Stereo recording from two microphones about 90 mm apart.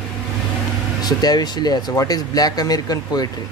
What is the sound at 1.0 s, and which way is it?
Speech, 50° left (ahead or behind).